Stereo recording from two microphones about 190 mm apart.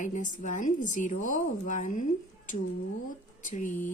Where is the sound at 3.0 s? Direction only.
40° left (ahead or behind).